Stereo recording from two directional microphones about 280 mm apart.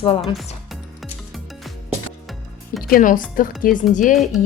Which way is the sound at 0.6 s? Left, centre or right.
Centre.